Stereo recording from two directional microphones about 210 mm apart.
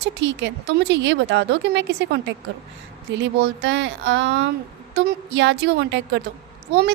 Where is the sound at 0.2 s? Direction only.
55° right (ahead or behind).